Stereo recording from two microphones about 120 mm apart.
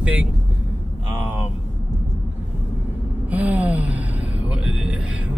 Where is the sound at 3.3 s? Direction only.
15° right (ahead or behind).